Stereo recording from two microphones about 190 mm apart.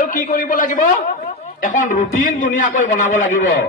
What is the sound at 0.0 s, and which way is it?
A man's voice, 45° left (ahead or behind).